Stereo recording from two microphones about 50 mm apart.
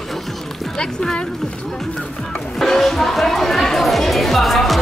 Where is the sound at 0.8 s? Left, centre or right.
Centre.